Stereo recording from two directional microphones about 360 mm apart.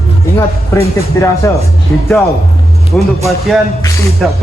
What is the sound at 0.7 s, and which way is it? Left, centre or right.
Speech, centre.